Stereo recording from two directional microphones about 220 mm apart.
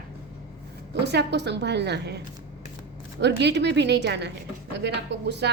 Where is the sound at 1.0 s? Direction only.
50° right (ahead or behind).